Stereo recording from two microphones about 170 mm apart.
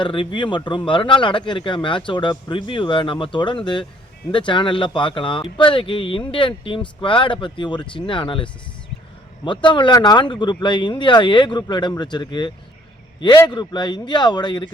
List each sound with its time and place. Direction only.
0.0 s speech: 30° left (ahead or behind)